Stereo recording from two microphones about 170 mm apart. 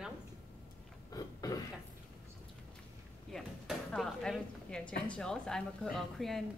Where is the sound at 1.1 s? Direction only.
20° left (ahead or behind).